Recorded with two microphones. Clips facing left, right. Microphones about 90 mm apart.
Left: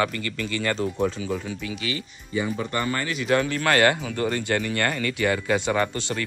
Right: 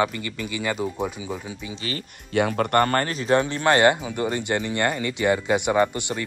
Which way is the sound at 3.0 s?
35° right (ahead or behind).